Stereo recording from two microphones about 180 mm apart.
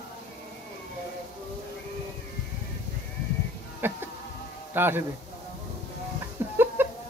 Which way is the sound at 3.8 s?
10° right (ahead or behind).